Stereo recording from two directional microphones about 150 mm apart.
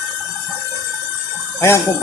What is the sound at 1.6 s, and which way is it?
Speech, 20° left (ahead or behind).